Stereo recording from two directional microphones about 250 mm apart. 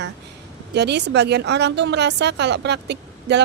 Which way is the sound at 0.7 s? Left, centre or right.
Right.